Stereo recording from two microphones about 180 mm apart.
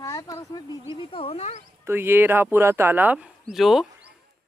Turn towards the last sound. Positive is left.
turn(degrees=0)  # may be behind; listen again after turning